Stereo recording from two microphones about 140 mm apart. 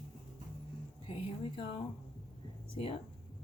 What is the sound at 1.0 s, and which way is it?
Speech, 40° left (ahead or behind).